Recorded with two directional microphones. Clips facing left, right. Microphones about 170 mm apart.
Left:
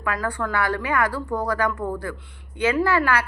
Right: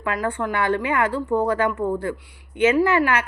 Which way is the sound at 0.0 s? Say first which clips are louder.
Right 2 dB; 25° right (ahead or behind).